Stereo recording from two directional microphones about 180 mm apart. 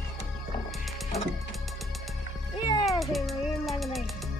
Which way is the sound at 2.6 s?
25° left (ahead or behind).